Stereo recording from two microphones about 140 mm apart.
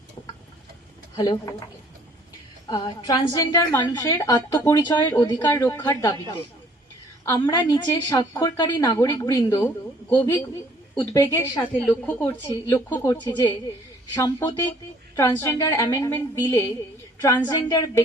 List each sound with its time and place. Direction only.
1.1 s a woman's voice: 30° left (ahead or behind)
2.6 s a woman's voice: 25° left (ahead or behind)
7.3 s a woman's voice: 25° left (ahead or behind)
10.9 s a woman's voice: 25° left (ahead or behind)
11.9 s a woman's voice: 15° left (ahead or behind)
12.5 s a woman's voice: 25° left (ahead or behind)
14.1 s a woman's voice: 30° left (ahead or behind)
14.6 s a woman's voice: 15° left (ahead or behind)